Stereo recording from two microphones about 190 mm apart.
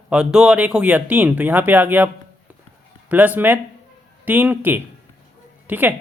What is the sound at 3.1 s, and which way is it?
A woman's voice, 10° right (ahead or behind).